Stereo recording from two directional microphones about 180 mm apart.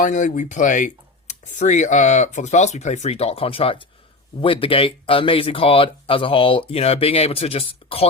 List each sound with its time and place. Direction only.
0.0 s speech: 45° left (ahead or behind)